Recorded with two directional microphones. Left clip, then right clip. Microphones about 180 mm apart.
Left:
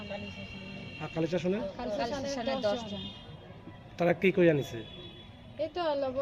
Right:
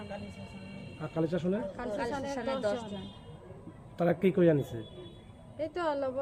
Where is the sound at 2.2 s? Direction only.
25° right (ahead or behind).